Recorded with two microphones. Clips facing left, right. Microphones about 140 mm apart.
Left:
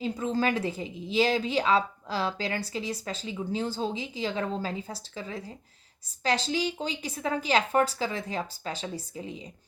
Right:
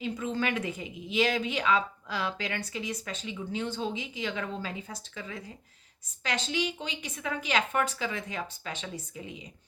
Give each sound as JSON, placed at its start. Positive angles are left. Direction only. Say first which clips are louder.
{"t": 0.0, "sound": "a woman's voice", "louder": "left 4 dB", "side_deg": 35}